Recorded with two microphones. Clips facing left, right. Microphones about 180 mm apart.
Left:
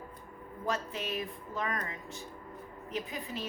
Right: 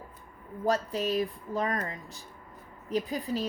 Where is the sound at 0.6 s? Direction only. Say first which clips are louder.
Right 7 dB; 35° right (ahead or behind).